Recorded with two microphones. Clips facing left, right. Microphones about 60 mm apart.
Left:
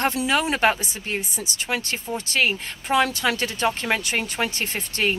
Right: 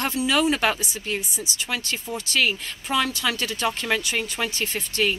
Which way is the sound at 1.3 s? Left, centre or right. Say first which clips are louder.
Left 1 dB; left.